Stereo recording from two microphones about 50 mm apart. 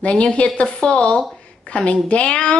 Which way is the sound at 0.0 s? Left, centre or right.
Left.